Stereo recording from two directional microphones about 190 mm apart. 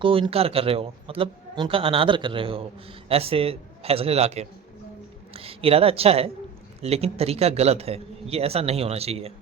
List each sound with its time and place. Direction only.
0.0 s a man's voice: 30° right (ahead or behind)